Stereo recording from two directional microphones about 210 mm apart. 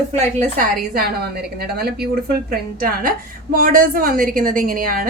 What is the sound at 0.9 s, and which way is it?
A woman's voice, 45° right (ahead or behind).